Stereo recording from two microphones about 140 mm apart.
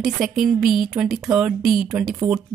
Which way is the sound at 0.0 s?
5° right (ahead or behind).